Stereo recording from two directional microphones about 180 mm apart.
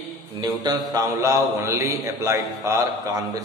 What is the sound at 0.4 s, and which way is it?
A man's voice, 20° right (ahead or behind).